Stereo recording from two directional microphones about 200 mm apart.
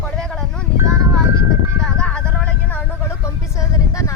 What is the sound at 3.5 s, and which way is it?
Speech, 15° left (ahead or behind).